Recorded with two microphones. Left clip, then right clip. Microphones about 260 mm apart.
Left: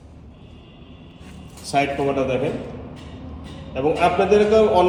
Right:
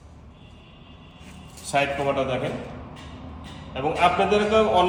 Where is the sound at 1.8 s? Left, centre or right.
Centre.